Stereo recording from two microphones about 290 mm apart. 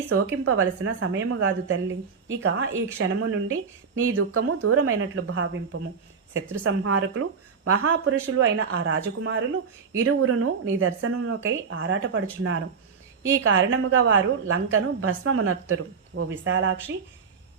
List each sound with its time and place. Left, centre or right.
0.1 s a woman's voice: right